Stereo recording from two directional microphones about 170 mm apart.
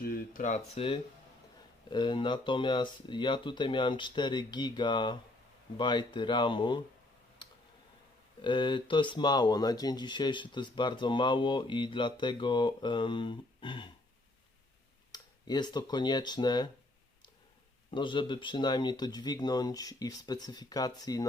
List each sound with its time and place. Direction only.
0.0 s a sound: 60° left (ahead or behind)
0.4 s speech: 40° left (ahead or behind)
7.4 s clicking: 30° left (ahead or behind)
8.4 s speech: 30° left (ahead or behind)
15.1 s speech: 25° left (ahead or behind)
17.9 s speech: 30° left (ahead or behind)